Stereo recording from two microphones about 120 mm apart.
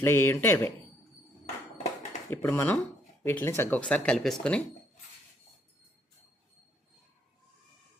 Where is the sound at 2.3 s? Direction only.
20° left (ahead or behind); by 4.3 s 5° left (ahead or behind).